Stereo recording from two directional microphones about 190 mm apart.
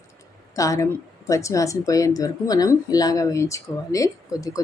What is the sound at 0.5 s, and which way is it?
Speech, 15° left (ahead or behind).